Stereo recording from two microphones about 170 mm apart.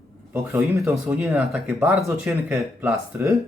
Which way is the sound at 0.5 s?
15° right (ahead or behind).